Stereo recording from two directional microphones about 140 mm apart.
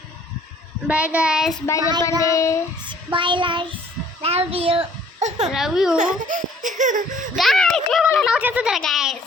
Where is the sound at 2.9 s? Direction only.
35° right (ahead or behind).